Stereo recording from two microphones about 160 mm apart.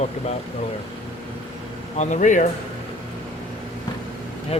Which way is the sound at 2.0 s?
50° left (ahead or behind).